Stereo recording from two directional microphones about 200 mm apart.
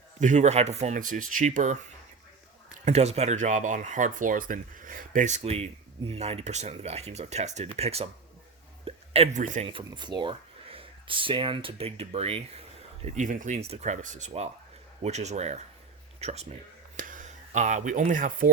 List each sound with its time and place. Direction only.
0.2 s speech: 35° right (ahead or behind)